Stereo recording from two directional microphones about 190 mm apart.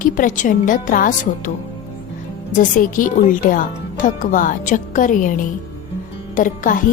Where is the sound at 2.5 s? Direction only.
45° left (ahead or behind).